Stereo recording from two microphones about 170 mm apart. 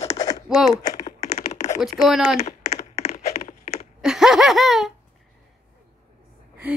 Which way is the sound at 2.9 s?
40° left (ahead or behind).